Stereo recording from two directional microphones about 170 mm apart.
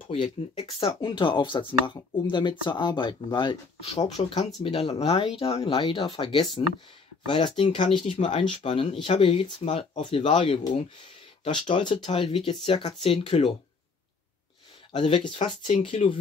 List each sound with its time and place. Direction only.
0.6 s speech: 30° left (ahead or behind)
14.9 s speech: 30° left (ahead or behind)